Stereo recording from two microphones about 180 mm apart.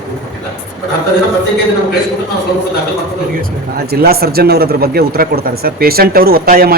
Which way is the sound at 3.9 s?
60° right (ahead or behind).